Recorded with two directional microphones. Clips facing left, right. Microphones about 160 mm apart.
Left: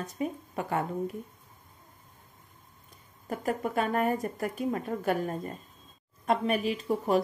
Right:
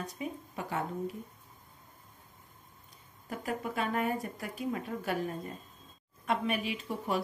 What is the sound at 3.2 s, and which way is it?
A woman's voice, 45° left (ahead or behind).